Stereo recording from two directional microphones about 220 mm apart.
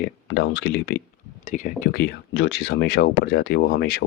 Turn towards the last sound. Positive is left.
turn(degrees=45)  # may be behind; listen again after turning